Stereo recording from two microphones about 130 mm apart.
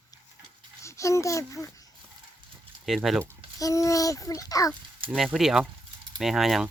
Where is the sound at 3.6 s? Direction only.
25° left (ahead or behind).